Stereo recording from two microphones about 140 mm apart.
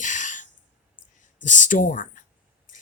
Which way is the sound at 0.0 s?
65° left (ahead or behind).